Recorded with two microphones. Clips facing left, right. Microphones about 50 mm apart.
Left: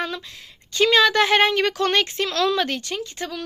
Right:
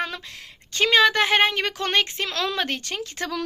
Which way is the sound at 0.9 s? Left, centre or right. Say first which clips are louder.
Left 1 dB; right.